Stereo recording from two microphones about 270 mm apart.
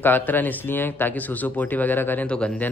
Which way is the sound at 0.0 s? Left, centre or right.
Centre.